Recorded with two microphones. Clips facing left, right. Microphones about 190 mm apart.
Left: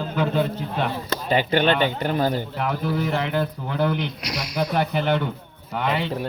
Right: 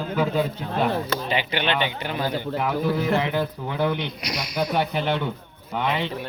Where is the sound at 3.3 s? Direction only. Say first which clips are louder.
Left 1 dB; centre (ahead or behind).